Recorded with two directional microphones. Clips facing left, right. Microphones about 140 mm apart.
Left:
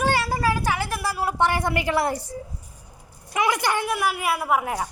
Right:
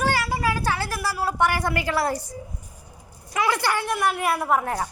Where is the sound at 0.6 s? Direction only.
15° left (ahead or behind).